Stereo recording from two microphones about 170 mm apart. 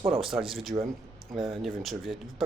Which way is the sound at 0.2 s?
Centre (ahead or behind).